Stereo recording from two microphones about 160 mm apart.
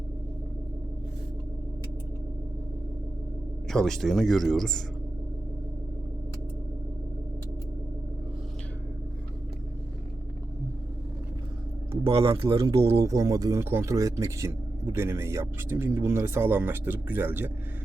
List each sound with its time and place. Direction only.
3.7 s speech: 5° left (ahead or behind)
11.9 s speech: 35° right (ahead or behind)
12.9 s speech: 20° right (ahead or behind)